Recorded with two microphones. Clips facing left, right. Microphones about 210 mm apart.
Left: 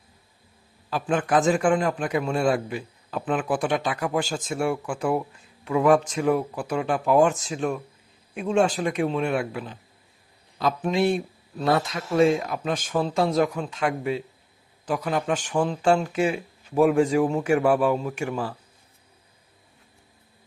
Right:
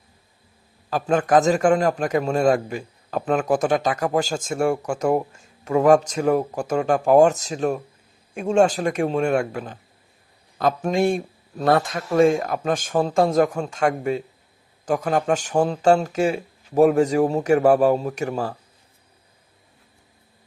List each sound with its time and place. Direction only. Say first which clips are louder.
0.9 s a man's voice: right 4 dB; 45° right (ahead or behind)